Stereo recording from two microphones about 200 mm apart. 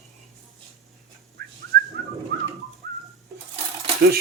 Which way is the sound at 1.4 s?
50° right (ahead or behind).